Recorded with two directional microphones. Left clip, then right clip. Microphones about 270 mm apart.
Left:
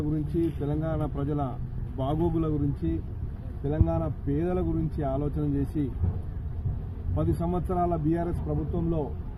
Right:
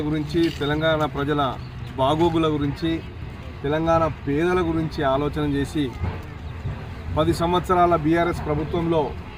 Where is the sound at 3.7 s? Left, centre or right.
Centre.